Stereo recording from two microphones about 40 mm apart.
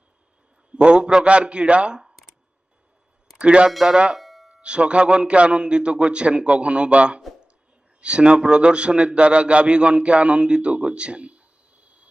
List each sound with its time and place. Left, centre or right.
0.7 s a man's voice: right
3.3 s a man's voice: right
4.2 s a sound: centre
4.6 s a man's voice: right